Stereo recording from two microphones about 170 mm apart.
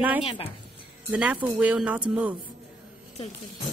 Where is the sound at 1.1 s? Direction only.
5° right (ahead or behind).